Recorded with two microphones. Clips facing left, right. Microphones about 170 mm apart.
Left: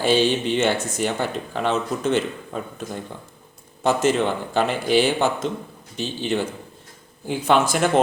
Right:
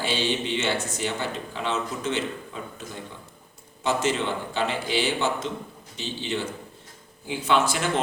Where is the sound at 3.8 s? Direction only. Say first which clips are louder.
Left 6 dB; 50° left (ahead or behind).